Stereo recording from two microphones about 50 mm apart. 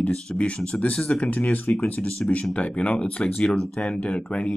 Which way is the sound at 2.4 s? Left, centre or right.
Left.